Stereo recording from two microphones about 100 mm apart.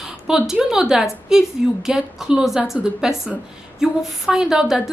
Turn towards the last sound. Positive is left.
turn(degrees=-5)  # may be behind; listen again after turning